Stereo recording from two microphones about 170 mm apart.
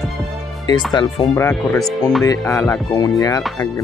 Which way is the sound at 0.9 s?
25° left (ahead or behind).